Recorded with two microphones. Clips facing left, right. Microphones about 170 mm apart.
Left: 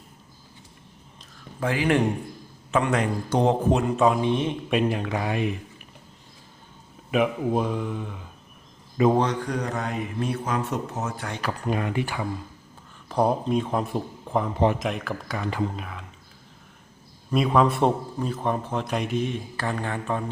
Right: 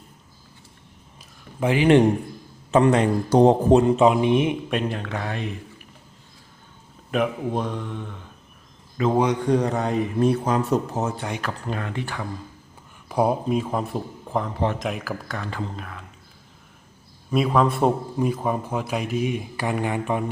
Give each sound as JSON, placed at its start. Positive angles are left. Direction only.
{"t": 1.5, "sound": "speech", "side_deg": -20}
{"t": 2.7, "sound": "speech", "side_deg": -30}
{"t": 4.7, "sound": "speech", "side_deg": 5}
{"t": 7.1, "sound": "a man's voice", "side_deg": 5}
{"t": 9.0, "sound": "a man's voice", "side_deg": 20}
{"t": 9.4, "sound": "speech", "side_deg": -25}
{"t": 11.6, "sound": "speech", "side_deg": 15}
{"t": 13.1, "sound": "a man's voice", "side_deg": -10}
{"t": 15.4, "sound": "speech", "side_deg": 15}
{"t": 15.7, "sound": "a man's voice", "side_deg": 5}
{"t": 17.3, "sound": "a man's voice", "side_deg": 0}
{"t": 18.2, "sound": "speech", "side_deg": -10}